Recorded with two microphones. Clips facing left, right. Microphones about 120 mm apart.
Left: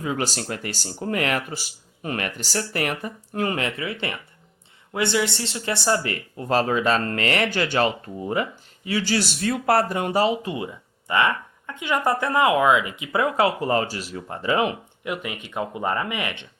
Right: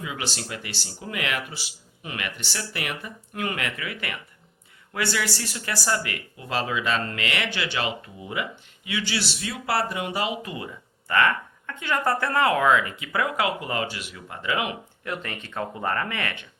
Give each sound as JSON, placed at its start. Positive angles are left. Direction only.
{"t": 0.0, "sound": "speech", "side_deg": 40}
{"t": 15.0, "sound": "speech", "side_deg": 15}